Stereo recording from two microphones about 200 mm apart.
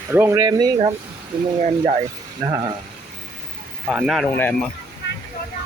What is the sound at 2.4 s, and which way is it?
Speech, 15° right (ahead or behind).